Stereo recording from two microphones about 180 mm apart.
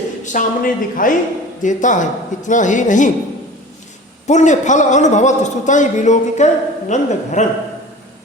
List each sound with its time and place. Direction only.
0.3 s a woman's voice: 50° left (ahead or behind)
4.3 s a man's voice: 40° left (ahead or behind)